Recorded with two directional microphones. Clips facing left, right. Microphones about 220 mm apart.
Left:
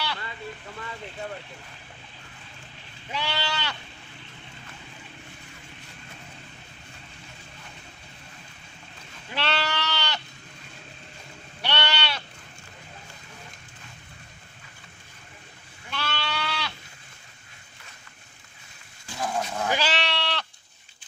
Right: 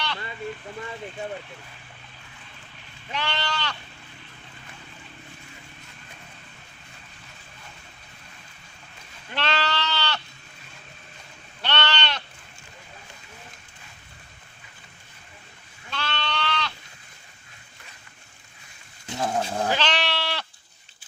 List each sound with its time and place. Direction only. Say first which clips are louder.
3.1 s speech: right 1 dB; 10° left (ahead or behind)
9.3 s goat: right 1 dB; 10° left (ahead or behind)
11.6 s sheep: right 1 dB; 10° left (ahead or behind)
15.9 s goat: right 1 dB; 5° left (ahead or behind)
19.0 s speech: right 3 dB; 30° right (ahead or behind)
19.7 s goat: right 1 dB; 5° left (ahead or behind)